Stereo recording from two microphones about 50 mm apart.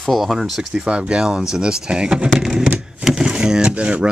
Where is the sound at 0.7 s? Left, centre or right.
Right.